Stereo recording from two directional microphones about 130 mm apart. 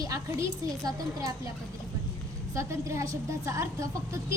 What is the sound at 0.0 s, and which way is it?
A woman's voice, 25° right (ahead or behind).